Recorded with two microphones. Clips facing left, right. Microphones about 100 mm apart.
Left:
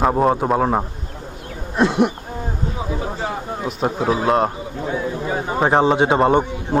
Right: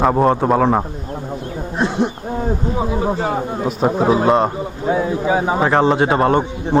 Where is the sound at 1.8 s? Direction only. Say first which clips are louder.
Left 2 dB; 75° left (ahead or behind).